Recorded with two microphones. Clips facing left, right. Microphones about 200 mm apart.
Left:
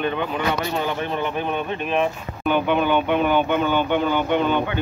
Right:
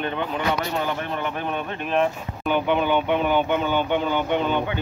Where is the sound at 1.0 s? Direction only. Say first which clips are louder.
Left 3 dB; 25° left (ahead or behind).